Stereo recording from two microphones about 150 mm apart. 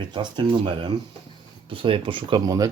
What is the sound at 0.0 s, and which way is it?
Speech, 30° right (ahead or behind).